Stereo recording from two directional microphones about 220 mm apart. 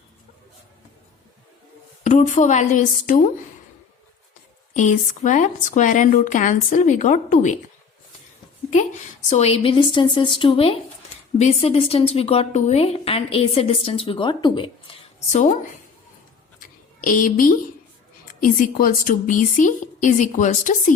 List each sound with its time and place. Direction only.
2.0 s speech: 35° left (ahead or behind)
4.7 s speech: 30° left (ahead or behind)
9.3 s a woman's voice: 30° left (ahead or behind)
16.6 s a sound: 40° left (ahead or behind)
18.8 s speech: 40° left (ahead or behind)